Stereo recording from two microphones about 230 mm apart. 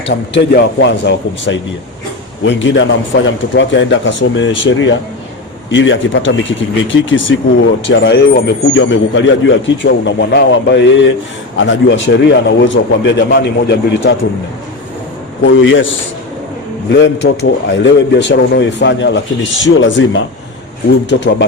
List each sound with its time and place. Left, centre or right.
0.3 s speech: left
15.4 s speech: left
17.0 s speech: left
21.1 s speech: left